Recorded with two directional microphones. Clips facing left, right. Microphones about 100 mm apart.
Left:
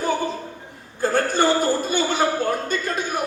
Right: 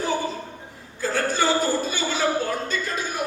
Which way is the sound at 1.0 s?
55° left (ahead or behind).